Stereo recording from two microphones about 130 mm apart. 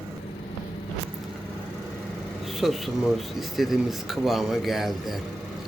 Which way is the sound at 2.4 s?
Centre (ahead or behind).